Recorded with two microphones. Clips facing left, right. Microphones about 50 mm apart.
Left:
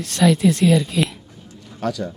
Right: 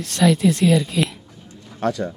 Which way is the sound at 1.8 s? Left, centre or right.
Right.